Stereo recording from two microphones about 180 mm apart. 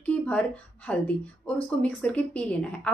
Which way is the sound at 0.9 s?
5° left (ahead or behind).